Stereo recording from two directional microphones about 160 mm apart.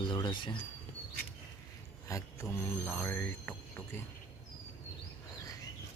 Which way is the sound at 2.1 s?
20° left (ahead or behind).